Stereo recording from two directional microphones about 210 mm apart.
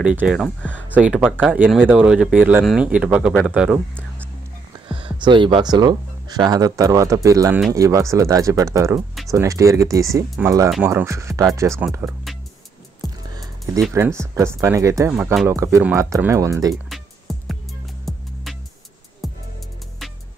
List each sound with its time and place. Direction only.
0.0 s speech: 5° right (ahead or behind)
0.9 s speech: 5° right (ahead or behind)
4.8 s speech: 25° right (ahead or behind); by 12.2 s 10° right (ahead or behind)
13.3 s music: 15° right (ahead or behind)
13.9 s speech: 15° right (ahead or behind)
16.9 s music: centre (ahead or behind)